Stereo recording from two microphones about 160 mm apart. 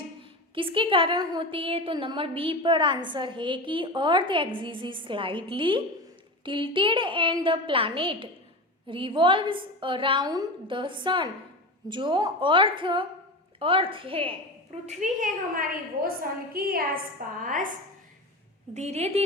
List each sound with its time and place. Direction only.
0.5 s a woman's voice: 35° right (ahead or behind)
14.8 s a woman's voice: 55° right (ahead or behind)
16.0 s a woman's voice: 65° right (ahead or behind)
17.4 s a woman's voice: 55° right (ahead or behind)
18.7 s a woman's voice: 45° right (ahead or behind)